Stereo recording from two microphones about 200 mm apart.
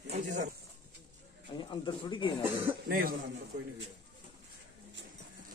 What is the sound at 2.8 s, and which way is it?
Speech, 45° right (ahead or behind).